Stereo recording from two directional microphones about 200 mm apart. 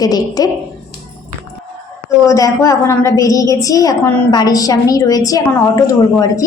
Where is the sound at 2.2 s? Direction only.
15° left (ahead or behind).